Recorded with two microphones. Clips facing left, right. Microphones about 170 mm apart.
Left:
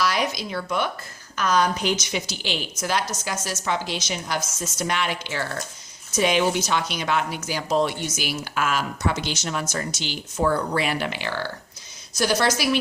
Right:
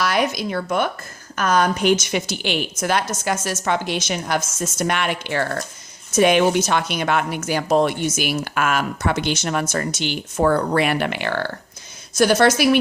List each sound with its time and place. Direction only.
0.0 s speech: 55° right (ahead or behind)